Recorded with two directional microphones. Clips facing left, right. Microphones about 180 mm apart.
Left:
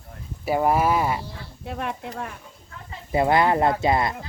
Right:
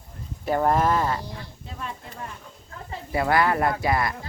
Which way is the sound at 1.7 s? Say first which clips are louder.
Left 8 dB; 65° left (ahead or behind).